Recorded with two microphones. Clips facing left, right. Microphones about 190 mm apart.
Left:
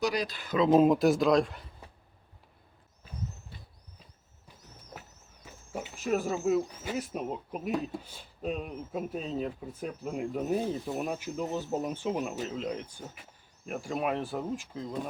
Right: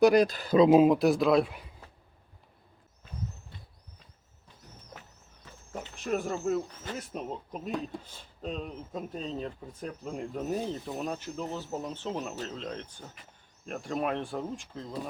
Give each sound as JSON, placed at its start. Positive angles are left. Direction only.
{"t": 0.0, "sound": "speech", "side_deg": -50}
{"t": 0.7, "sound": "speech", "side_deg": -5}
{"t": 5.5, "sound": "speech", "side_deg": 10}